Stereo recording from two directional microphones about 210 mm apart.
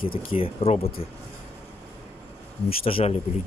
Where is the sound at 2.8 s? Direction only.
30° left (ahead or behind).